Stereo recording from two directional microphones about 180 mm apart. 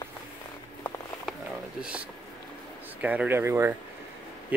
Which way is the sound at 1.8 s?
5° right (ahead or behind).